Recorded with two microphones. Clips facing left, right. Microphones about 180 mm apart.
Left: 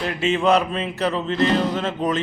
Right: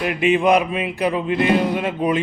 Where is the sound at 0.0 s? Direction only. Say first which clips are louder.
Right 3 dB; 15° right (ahead or behind).